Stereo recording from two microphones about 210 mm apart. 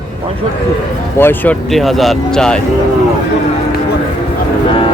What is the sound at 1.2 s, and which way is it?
Speech, 10° left (ahead or behind).